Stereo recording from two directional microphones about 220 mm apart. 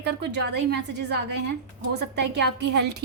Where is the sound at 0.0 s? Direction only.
50° right (ahead or behind).